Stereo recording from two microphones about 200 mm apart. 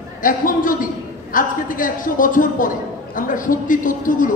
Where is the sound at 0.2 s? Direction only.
40° left (ahead or behind).